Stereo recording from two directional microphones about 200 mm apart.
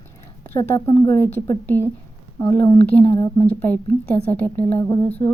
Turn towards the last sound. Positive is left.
turn(degrees=20)  # may be behind; listen again after turning